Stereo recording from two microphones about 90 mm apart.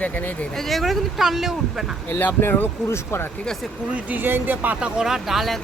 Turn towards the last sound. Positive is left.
turn(degrees=0)  # may be behind; listen again after turning